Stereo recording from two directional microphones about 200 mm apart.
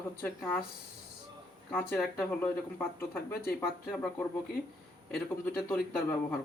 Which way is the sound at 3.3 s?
50° left (ahead or behind).